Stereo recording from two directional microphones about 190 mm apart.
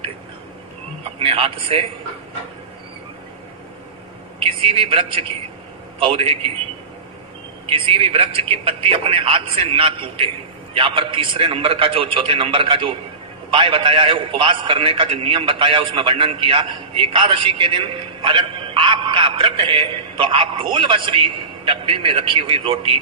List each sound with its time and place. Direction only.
1.2 s a man's voice: 30° right (ahead or behind)
4.4 s a man's voice: 30° right (ahead or behind)
7.7 s a man's voice: 30° right (ahead or behind)